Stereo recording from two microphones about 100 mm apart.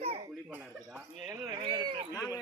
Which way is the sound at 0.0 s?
75° right (ahead or behind).